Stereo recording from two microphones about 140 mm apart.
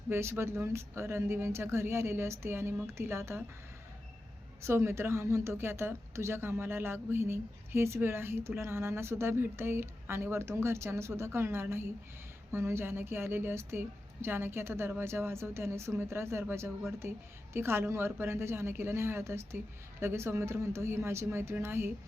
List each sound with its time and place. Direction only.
0.1 s a woman's voice: 15° right (ahead or behind)
4.6 s a woman's voice: 20° right (ahead or behind)